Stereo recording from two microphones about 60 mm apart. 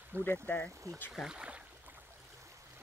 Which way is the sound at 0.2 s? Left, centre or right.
Left.